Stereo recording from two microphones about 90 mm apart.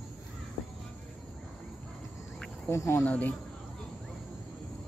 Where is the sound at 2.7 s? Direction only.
30° left (ahead or behind).